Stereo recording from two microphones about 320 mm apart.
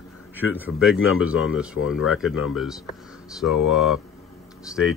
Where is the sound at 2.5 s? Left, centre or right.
Centre.